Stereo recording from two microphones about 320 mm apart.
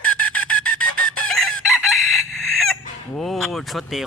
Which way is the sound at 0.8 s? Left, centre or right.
Left.